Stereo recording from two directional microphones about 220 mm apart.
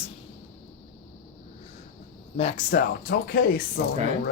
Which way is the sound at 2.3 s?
30° left (ahead or behind).